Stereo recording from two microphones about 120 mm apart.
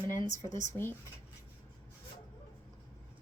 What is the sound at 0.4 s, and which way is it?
Speech, 35° left (ahead or behind).